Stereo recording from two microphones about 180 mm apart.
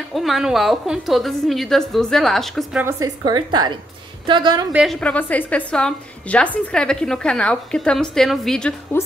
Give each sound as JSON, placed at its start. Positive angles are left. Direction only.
{"t": 0.1, "sound": "a woman's voice", "side_deg": 0}
{"t": 2.8, "sound": "a woman's voice", "side_deg": -15}
{"t": 5.0, "sound": "a woman's voice", "side_deg": 5}